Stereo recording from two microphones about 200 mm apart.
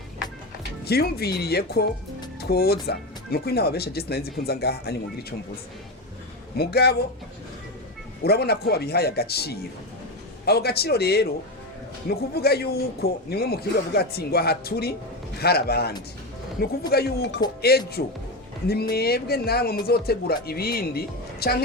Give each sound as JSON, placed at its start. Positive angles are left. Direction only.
{"t": 0.9, "sound": "a man's voice", "side_deg": 50}
{"t": 6.6, "sound": "a man's voice", "side_deg": 50}
{"t": 8.2, "sound": "a man's voice", "side_deg": 55}